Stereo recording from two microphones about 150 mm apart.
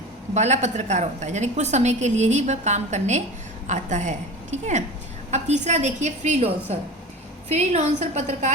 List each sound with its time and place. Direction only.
0.3 s a woman's voice: 50° right (ahead or behind)